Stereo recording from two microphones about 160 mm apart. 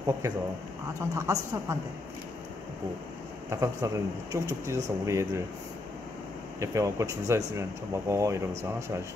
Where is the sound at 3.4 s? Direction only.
20° right (ahead or behind).